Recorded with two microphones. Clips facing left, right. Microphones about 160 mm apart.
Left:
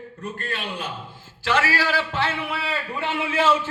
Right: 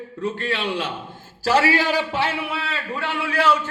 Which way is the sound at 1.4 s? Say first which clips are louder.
Right 4 dB; 30° right (ahead or behind).